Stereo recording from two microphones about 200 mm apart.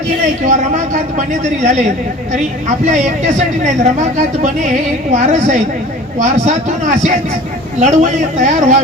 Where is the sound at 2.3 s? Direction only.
35° right (ahead or behind).